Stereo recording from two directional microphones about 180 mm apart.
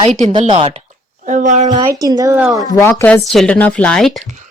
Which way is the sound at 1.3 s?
45° right (ahead or behind).